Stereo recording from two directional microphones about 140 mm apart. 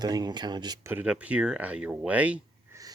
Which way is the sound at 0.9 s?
10° right (ahead or behind).